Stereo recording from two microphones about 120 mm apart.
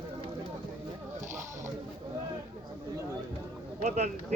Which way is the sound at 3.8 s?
75° right (ahead or behind).